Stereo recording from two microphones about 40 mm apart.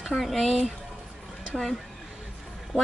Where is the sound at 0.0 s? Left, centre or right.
Centre.